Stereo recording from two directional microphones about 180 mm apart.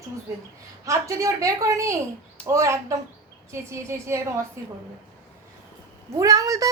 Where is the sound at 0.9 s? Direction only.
15° right (ahead or behind).